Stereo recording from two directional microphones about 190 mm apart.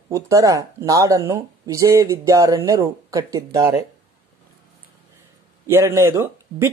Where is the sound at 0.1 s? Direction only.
15° right (ahead or behind).